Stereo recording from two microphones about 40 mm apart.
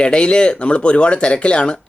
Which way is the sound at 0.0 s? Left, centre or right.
Left.